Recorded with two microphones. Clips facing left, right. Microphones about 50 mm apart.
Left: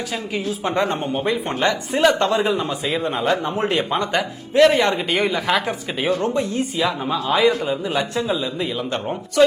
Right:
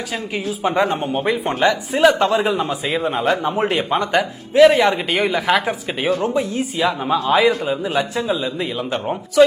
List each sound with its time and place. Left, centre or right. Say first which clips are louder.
0.3 s speech: right 3 dB; centre